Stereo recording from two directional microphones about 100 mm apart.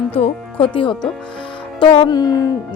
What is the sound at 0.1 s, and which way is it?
Speech, 70° left (ahead or behind).